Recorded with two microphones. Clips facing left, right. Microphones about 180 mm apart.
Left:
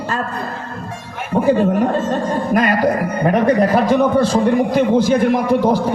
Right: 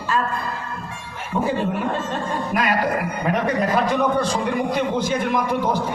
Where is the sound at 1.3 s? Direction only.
40° left (ahead or behind).